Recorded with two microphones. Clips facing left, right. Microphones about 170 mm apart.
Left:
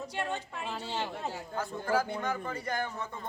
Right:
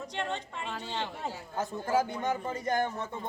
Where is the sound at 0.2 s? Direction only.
5° left (ahead or behind).